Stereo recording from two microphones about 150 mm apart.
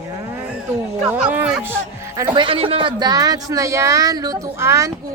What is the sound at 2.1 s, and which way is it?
A woman's voice, 25° right (ahead or behind).